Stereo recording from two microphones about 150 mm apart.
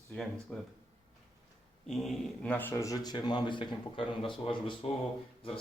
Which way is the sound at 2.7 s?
20° left (ahead or behind).